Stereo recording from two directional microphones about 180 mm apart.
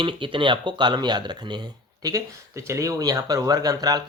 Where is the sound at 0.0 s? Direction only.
30° right (ahead or behind).